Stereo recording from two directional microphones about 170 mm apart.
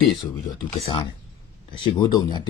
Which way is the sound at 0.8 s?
35° left (ahead or behind).